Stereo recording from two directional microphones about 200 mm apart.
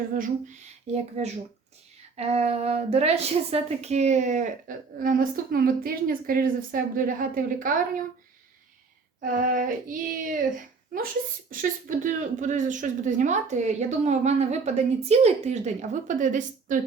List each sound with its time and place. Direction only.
0.1 s a woman's voice: 40° right (ahead or behind)
9.2 s a woman's voice: 45° right (ahead or behind)
11.5 s a woman's voice: 40° right (ahead or behind)